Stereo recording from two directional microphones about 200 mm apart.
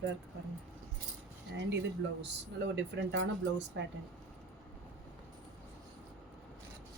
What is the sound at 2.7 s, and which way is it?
Speech, 60° right (ahead or behind).